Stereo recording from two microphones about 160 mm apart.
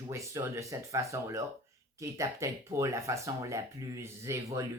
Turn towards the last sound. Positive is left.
turn(degrees=-20)  # may be behind; listen again after turning